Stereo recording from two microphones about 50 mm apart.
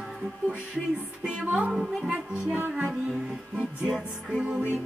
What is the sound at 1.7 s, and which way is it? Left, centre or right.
Music, centre.